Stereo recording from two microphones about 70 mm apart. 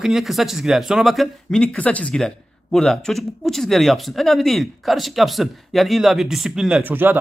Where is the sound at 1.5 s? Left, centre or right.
Centre.